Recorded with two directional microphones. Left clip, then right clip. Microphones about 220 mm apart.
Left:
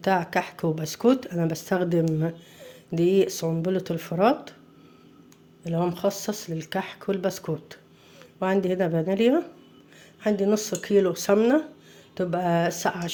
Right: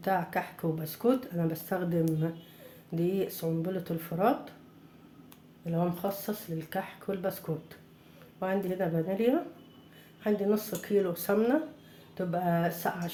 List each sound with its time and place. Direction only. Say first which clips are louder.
0.0 s speech: left 6 dB; 40° left (ahead or behind)
5.6 s speech: left 7 dB; 45° left (ahead or behind)